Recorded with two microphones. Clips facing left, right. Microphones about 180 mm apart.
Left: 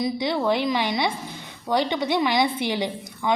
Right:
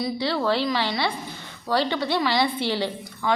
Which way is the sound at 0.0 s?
15° left (ahead or behind).